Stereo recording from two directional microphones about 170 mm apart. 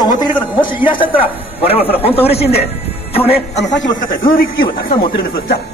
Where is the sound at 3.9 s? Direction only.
60° left (ahead or behind).